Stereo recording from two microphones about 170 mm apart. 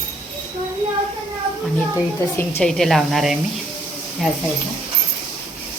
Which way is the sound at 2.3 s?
15° left (ahead or behind).